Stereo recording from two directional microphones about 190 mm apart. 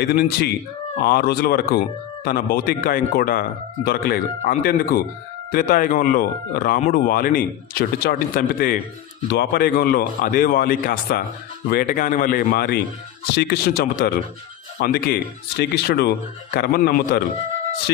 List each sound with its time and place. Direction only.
0.0 s speech: 55° left (ahead or behind)